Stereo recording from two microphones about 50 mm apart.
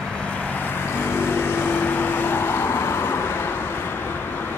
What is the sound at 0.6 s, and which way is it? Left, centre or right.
Vehicle, left.